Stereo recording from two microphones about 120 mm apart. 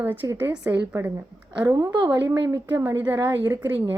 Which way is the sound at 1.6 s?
30° right (ahead or behind).